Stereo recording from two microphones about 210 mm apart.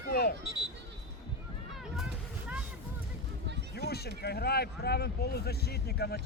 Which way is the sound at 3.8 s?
50° left (ahead or behind).